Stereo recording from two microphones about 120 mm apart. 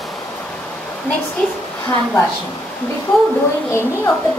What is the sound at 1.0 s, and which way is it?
Speech, 15° left (ahead or behind).